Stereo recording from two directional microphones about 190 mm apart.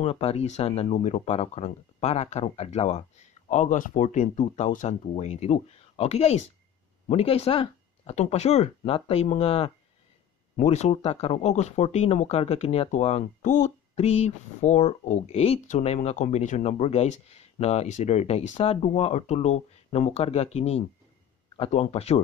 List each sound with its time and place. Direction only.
0.0 s speech: 30° left (ahead or behind)
10.7 s speech: 35° left (ahead or behind)